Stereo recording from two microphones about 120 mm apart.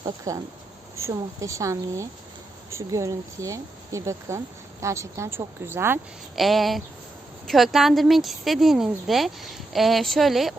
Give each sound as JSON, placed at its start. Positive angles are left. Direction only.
{"t": 0.3, "sound": "speech", "side_deg": -30}
{"t": 6.3, "sound": "speech", "side_deg": 0}